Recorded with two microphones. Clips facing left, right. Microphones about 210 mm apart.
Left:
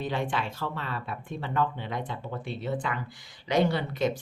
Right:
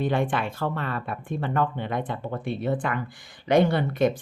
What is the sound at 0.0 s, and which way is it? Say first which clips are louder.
Speech: right 5 dB; 55° right (ahead or behind).